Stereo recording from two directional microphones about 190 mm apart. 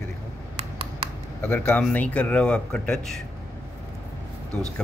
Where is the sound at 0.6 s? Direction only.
30° right (ahead or behind).